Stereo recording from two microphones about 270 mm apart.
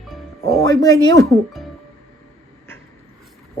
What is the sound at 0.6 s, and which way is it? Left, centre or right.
Speech, centre.